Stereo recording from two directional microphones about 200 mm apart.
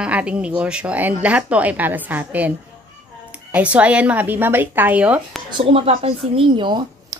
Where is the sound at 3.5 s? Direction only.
5° right (ahead or behind).